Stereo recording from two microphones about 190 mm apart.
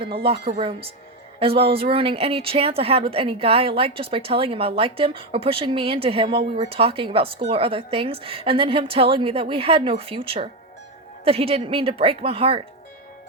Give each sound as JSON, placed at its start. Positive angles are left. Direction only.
{"t": 0.6, "sound": "a woman's voice", "side_deg": -30}